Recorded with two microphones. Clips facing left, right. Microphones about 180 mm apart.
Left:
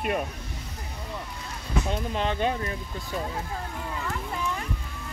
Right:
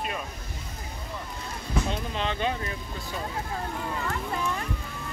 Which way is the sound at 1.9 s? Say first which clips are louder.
Left 2 dB; 50° left (ahead or behind).